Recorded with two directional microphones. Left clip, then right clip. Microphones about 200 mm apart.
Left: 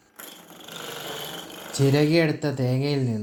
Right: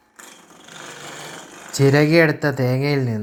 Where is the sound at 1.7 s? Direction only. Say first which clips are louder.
Right 6 dB; 15° right (ahead or behind).